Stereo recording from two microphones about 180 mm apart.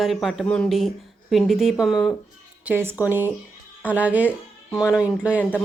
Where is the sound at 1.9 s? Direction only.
25° left (ahead or behind).